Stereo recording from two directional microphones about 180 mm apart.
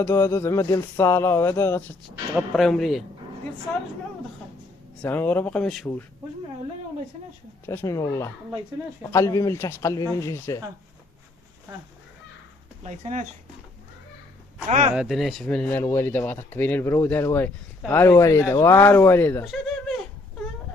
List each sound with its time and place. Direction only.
0.0 s speech: 15° left (ahead or behind)
2.0 s a man's voice: centre (ahead or behind)
5.0 s speech: 10° left (ahead or behind)
7.7 s speech: 15° left (ahead or behind)
12.8 s speech: 40° right (ahead or behind)
14.7 s speech: 40° right (ahead or behind)
14.9 s speech: centre (ahead or behind)